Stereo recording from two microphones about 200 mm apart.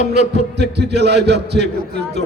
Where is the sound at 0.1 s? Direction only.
55° right (ahead or behind).